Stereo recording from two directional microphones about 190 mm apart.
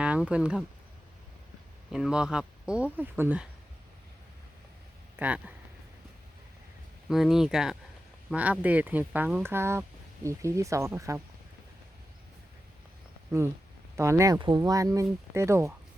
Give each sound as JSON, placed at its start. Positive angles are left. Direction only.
{"t": 0.0, "sound": "speech", "side_deg": -5}
{"t": 1.9, "sound": "speech", "side_deg": -5}
{"t": 5.1, "sound": "speech", "side_deg": -10}
{"t": 7.1, "sound": "speech", "side_deg": 0}
{"t": 13.9, "sound": "speech", "side_deg": -15}